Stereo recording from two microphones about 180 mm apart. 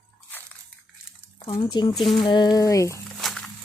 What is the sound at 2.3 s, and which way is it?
Speech, 25° left (ahead or behind).